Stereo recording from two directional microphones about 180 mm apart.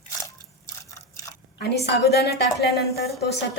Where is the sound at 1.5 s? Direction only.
70° left (ahead or behind).